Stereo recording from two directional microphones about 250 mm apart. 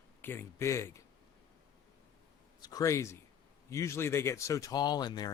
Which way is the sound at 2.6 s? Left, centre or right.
Centre.